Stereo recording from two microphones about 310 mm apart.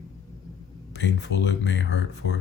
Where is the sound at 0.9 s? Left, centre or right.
Left.